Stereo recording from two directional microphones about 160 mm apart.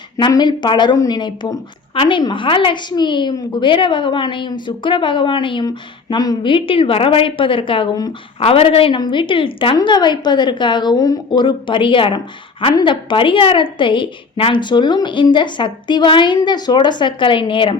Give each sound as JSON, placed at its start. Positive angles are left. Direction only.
{"t": 0.2, "sound": "a woman's voice", "side_deg": 30}